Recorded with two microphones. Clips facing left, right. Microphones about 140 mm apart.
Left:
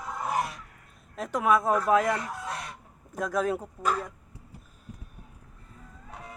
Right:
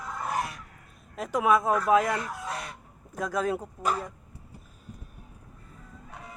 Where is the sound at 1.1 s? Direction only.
5° right (ahead or behind).